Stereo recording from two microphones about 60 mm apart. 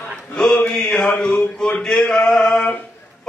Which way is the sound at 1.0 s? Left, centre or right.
Left.